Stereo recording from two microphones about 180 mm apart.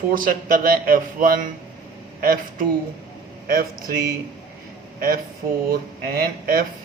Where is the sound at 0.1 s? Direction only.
50° right (ahead or behind).